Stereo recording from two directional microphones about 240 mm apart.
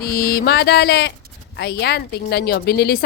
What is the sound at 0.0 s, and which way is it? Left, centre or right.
A woman's voice, left.